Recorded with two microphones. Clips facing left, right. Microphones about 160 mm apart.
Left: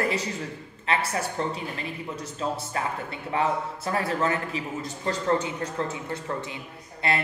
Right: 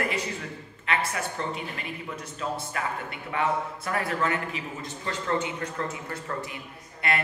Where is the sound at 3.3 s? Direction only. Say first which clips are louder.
Left 1 dB; 30° left (ahead or behind).